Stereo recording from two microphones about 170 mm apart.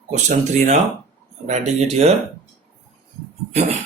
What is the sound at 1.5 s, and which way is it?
Speech, 40° right (ahead or behind).